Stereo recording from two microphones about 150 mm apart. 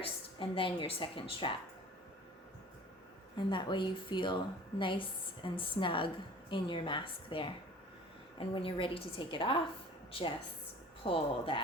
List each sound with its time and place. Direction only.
0.0 s speech: 35° left (ahead or behind)
3.3 s a woman's voice: 30° left (ahead or behind)